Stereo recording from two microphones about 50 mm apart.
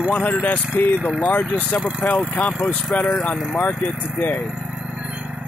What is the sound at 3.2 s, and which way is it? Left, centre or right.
Speech, left.